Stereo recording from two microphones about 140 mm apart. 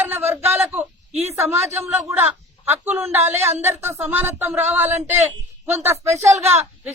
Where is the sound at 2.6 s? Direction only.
15° right (ahead or behind).